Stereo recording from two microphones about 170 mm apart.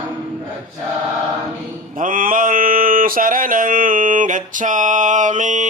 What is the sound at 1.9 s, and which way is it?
Mantra, 55° right (ahead or behind).